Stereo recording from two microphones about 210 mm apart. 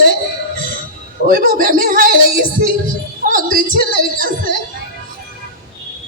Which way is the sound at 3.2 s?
40° right (ahead or behind).